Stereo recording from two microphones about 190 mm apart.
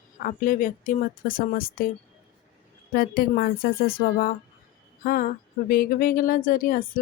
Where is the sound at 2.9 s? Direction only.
50° left (ahead or behind).